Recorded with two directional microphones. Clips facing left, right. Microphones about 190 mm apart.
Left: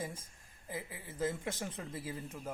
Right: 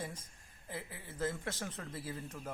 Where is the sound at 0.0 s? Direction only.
10° left (ahead or behind).